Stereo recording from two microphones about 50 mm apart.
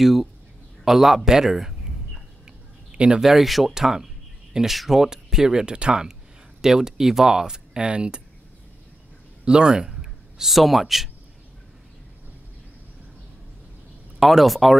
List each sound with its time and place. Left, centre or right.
0.0 s a man's voice: centre
2.9 s a sound: centre
3.2 s speech: centre
9.4 s a sound: centre
10.5 s speech: centre
14.2 s speech: centre